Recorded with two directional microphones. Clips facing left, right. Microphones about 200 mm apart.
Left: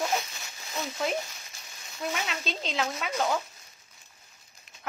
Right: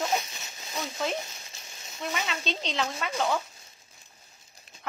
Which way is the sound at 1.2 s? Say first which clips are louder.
Right 1 dB; 25° right (ahead or behind).